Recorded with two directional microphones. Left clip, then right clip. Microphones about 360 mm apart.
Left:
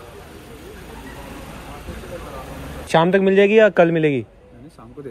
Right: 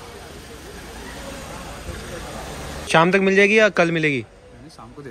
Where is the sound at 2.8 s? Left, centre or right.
Centre.